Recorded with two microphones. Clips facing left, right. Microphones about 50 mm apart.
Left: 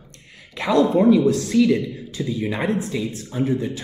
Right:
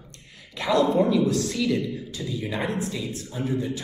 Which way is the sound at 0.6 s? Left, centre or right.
Left.